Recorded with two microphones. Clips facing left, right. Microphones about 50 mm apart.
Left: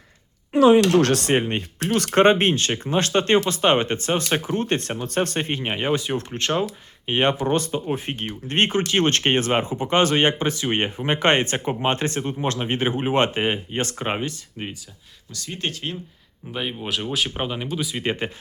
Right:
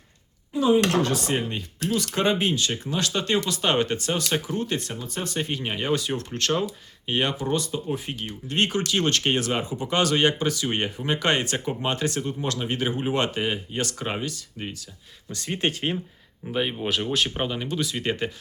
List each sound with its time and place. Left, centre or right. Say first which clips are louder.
0.5 s speech: left 6 dB; left
1.3 s speech: left 6 dB; left
5.4 s speech: left 3 dB; left
15.3 s speech: right 3 dB; right
16.5 s speech: right 2 dB; centre